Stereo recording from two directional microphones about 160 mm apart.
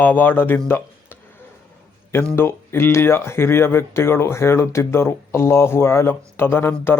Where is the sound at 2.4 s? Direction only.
15° left (ahead or behind).